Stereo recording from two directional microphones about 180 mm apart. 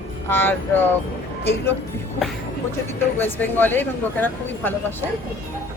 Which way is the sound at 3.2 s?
10° left (ahead or behind).